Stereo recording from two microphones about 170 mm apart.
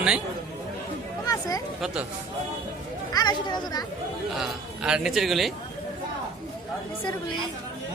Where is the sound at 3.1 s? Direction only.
25° left (ahead or behind).